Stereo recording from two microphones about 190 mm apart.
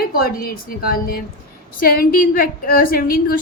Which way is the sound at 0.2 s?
50° left (ahead or behind).